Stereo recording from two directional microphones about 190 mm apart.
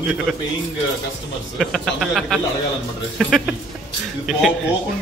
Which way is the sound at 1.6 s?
Centre (ahead or behind).